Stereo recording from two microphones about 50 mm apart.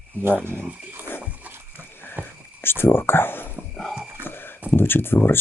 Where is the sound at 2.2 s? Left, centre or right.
Right.